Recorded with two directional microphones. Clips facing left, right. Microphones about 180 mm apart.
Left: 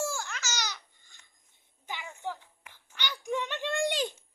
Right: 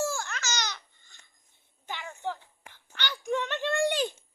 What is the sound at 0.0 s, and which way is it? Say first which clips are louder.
Babbling: right 3 dB; 10° left (ahead or behind).